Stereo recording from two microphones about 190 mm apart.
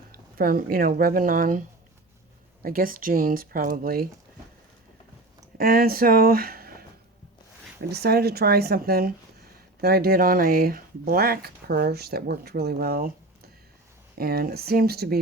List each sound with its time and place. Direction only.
0.1 s speech: 50° right (ahead or behind)
2.6 s speech: 50° right (ahead or behind)
5.5 s speech: 55° right (ahead or behind)